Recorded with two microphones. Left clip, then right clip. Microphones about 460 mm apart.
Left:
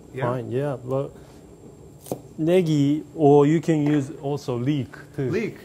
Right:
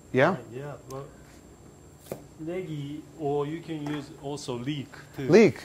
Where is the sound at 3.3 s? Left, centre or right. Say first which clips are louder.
Left 13 dB; left.